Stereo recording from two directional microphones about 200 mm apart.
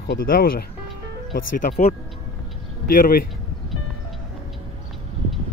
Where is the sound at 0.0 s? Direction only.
45° left (ahead or behind).